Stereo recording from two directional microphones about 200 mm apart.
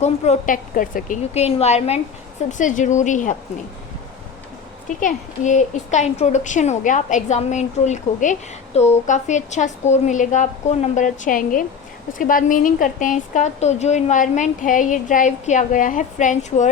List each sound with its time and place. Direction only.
0.0 s a woman's voice: 40° left (ahead or behind)
4.9 s a woman's voice: 40° left (ahead or behind)